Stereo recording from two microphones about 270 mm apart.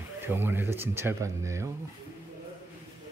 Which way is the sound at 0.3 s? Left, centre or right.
Centre.